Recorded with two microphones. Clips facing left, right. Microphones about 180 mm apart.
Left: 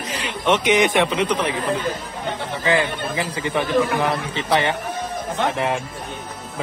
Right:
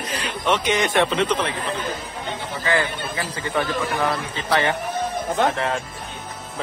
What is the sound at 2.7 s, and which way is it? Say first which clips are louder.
A man's voice: left 3 dB; 20° left (ahead or behind).